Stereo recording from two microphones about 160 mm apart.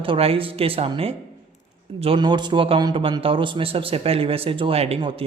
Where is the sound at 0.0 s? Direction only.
35° right (ahead or behind).